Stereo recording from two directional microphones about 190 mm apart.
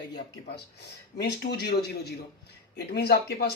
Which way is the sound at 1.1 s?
60° left (ahead or behind).